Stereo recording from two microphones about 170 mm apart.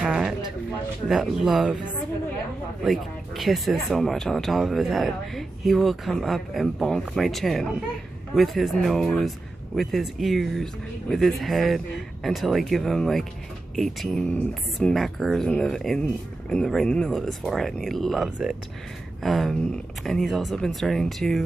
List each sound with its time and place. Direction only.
0.0 s a sound: 5° right (ahead or behind)
1.0 s speech: centre (ahead or behind)
2.8 s speech: centre (ahead or behind)